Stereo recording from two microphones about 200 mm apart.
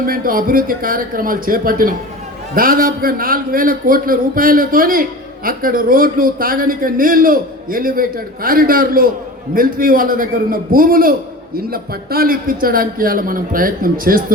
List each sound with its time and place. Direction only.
0.0 s a man's voice: 45° right (ahead or behind)